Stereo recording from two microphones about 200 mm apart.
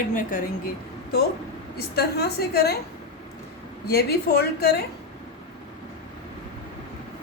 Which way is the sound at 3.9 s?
50° left (ahead or behind).